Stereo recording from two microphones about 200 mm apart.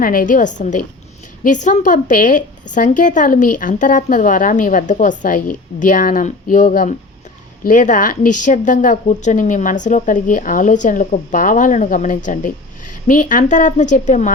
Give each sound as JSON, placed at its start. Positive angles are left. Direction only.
{"t": 0.0, "sound": "a woman's voice", "side_deg": 45}